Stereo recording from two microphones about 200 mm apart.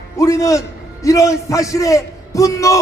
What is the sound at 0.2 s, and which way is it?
A man's voice, 15° left (ahead or behind).